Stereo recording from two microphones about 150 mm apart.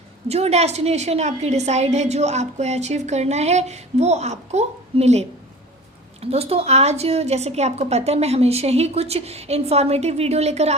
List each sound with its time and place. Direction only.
0.3 s a woman's voice: 45° right (ahead or behind)
6.3 s a woman's voice: 40° right (ahead or behind)